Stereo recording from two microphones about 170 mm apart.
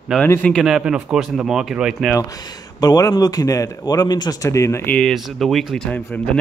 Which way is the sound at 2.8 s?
20° left (ahead or behind).